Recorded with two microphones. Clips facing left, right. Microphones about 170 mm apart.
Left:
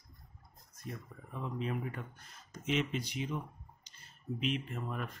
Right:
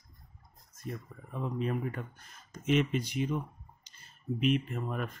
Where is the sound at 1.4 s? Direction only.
50° right (ahead or behind).